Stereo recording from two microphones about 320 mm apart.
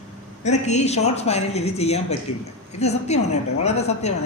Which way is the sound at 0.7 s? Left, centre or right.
Left.